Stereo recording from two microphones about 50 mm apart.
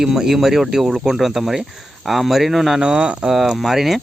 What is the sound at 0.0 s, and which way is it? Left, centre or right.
Speech, centre.